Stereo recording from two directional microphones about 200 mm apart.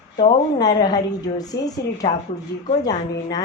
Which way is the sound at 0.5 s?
20° left (ahead or behind).